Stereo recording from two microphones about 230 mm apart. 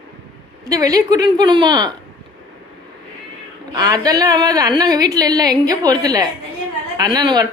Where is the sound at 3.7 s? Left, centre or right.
Centre.